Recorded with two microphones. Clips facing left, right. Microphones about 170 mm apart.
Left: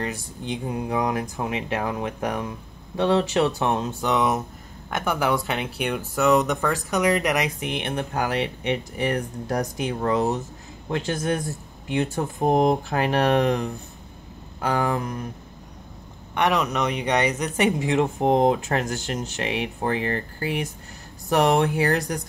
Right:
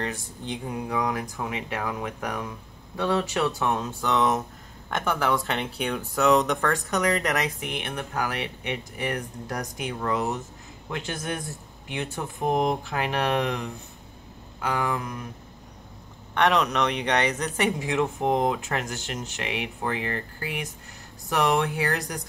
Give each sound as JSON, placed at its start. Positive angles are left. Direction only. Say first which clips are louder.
{"t": 0.0, "sound": "speech", "louder": "left 2 dB", "side_deg": 10}
{"t": 0.7, "sound": "speech", "louder": "left 3 dB", "side_deg": 25}
{"t": 4.1, "sound": "speech", "louder": "left 1 dB", "side_deg": 10}
{"t": 16.3, "sound": "speech", "louder": "even", "side_deg": 5}